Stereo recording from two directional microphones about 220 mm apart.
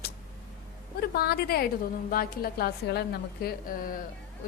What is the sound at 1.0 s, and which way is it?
A woman's voice, 45° left (ahead or behind).